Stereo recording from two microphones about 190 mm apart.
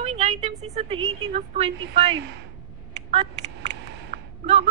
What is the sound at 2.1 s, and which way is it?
Speech, 65° right (ahead or behind).